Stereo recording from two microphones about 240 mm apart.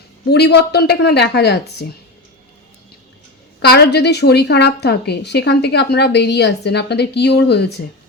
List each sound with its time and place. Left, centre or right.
0.3 s a woman's voice: left
3.6 s a woman's voice: left